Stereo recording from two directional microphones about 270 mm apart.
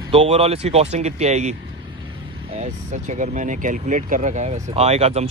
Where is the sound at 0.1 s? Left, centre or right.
Right.